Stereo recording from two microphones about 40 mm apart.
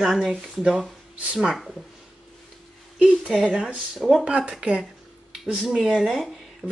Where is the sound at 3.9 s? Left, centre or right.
Centre.